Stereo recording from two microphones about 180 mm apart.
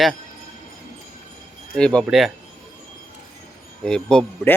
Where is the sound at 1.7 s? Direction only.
5° left (ahead or behind).